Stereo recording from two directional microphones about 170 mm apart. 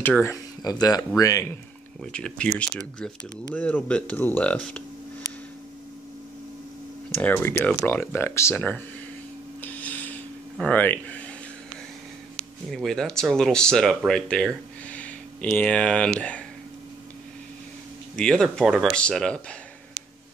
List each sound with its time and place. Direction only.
0.0 s speech: 10° left (ahead or behind)
2.0 s speech: 5° left (ahead or behind)
7.1 s speech: 10° left (ahead or behind)
9.6 s a sound: 10° left (ahead or behind)
12.7 s speech: 5° left (ahead or behind)
18.1 s speech: 5° left (ahead or behind)